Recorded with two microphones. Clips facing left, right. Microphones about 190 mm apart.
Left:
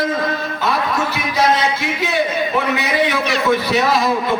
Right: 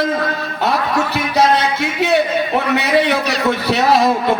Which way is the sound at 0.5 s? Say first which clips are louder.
Right 5 dB; 65° right (ahead or behind).